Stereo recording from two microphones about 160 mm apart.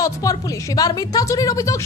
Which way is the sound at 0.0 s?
20° left (ahead or behind).